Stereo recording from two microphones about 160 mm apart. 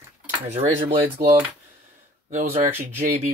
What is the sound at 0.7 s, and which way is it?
Speech, 40° right (ahead or behind).